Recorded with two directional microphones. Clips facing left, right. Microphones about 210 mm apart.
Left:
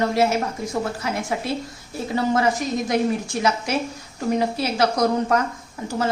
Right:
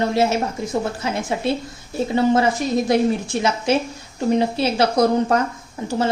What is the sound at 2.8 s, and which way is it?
A woman's voice, 25° right (ahead or behind).